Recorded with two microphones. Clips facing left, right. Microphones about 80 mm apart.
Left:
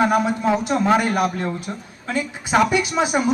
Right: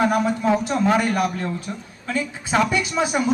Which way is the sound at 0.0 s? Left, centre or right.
Left.